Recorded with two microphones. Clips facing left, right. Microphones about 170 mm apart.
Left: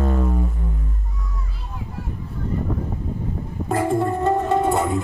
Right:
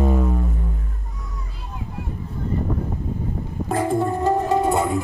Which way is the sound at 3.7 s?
Centre (ahead or behind).